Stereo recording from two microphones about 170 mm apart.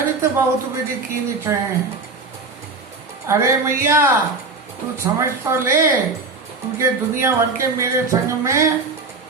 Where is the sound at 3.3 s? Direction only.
15° right (ahead or behind).